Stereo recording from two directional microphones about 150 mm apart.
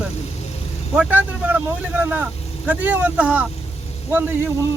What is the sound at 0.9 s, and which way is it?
Speech, 10° right (ahead or behind).